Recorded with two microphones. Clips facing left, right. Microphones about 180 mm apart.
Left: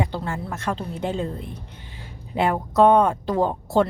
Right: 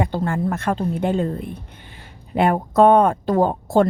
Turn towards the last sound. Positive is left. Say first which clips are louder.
# right 3 dB
turn(degrees=-50)  # may be behind; listen again after turning